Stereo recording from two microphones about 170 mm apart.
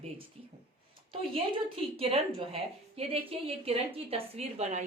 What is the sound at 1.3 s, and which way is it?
Speech, 35° right (ahead or behind).